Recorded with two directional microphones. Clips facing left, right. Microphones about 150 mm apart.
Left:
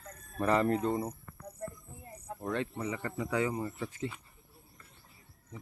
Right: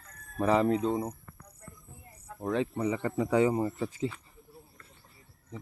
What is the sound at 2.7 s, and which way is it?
Speech, 30° right (ahead or behind).